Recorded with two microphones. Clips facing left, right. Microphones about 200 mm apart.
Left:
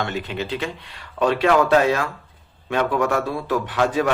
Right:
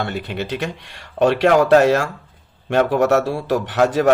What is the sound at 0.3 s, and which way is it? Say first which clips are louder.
Speech: right 2 dB; 75° right (ahead or behind).